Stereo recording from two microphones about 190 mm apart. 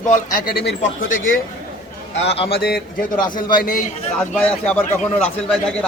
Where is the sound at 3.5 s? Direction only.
50° left (ahead or behind).